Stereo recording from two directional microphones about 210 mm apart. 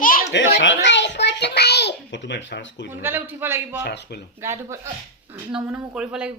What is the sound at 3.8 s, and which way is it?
Speech, 50° left (ahead or behind).